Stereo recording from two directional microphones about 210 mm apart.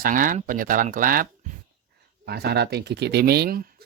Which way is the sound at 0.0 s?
40° right (ahead or behind).